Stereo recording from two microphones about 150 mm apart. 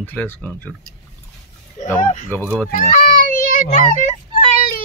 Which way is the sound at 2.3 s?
10° left (ahead or behind).